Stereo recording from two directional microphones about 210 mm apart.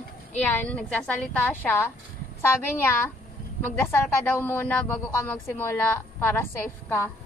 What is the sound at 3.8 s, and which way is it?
A woman's voice, 10° left (ahead or behind).